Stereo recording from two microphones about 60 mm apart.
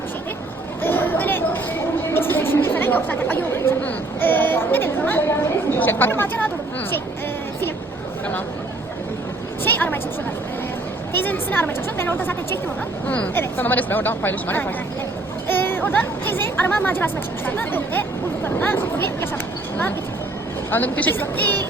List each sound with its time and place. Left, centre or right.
0.8 s chatter: left
3.8 s a sound: left
5.8 s a woman's voice: left
9.6 s a sound: left
11.1 s a woman's voice: left
13.1 s a woman's voice: left
13.3 s a woman's voice: left
20.7 s a woman's voice: left